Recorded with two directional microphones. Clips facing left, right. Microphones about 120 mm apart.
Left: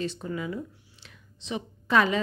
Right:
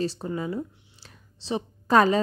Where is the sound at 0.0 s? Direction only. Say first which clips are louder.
Right 3 dB; 35° right (ahead or behind).